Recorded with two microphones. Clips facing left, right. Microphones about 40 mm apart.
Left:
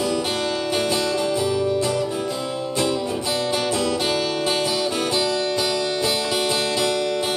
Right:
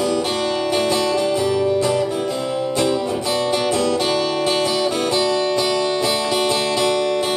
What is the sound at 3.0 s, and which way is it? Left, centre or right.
Music, centre.